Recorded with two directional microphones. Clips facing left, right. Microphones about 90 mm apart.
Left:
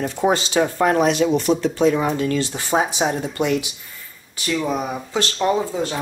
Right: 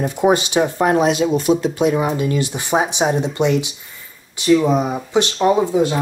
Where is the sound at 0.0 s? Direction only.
15° right (ahead or behind).